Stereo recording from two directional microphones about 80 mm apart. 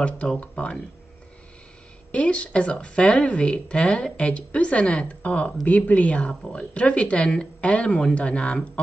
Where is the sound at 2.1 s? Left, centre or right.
Centre.